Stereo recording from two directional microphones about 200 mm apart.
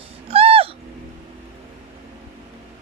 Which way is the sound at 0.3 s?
30° right (ahead or behind).